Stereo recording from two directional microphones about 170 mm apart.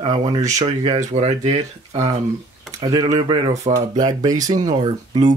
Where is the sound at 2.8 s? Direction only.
20° right (ahead or behind).